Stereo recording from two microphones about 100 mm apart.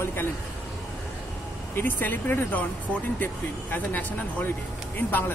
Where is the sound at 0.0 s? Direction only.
25° left (ahead or behind).